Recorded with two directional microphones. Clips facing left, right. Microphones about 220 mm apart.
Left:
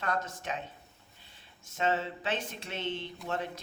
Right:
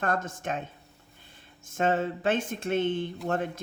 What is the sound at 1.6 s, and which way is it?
Speech, 50° right (ahead or behind).